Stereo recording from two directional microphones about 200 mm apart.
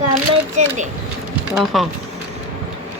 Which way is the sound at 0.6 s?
35° right (ahead or behind).